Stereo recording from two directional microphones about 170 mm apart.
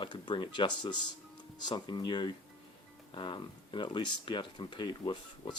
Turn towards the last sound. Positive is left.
turn(degrees=25)  # may be behind; listen again after turning